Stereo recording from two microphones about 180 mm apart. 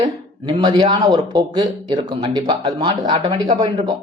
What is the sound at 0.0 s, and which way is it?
Speech, 25° right (ahead or behind).